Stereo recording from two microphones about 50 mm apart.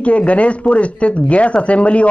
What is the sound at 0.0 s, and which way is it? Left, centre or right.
Speech, left.